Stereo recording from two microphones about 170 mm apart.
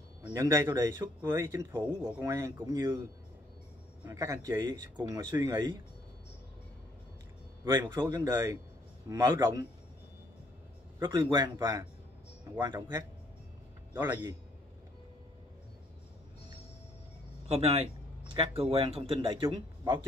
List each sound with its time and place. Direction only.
0.2 s speech: 20° right (ahead or behind)
4.0 s speech: 20° right (ahead or behind)
7.6 s speech: 20° right (ahead or behind)
11.0 s speech: 25° right (ahead or behind)
13.9 s speech: 15° right (ahead or behind)
17.5 s speech: 35° right (ahead or behind)
19.4 s a man's voice: 20° right (ahead or behind)